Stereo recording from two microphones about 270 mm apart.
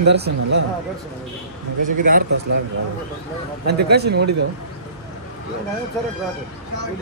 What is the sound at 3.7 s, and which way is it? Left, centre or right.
Speech, right.